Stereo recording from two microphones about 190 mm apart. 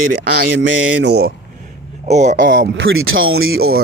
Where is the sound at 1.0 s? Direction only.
60° right (ahead or behind).